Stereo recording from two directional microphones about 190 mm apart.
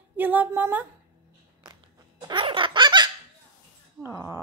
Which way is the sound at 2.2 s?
25° right (ahead or behind).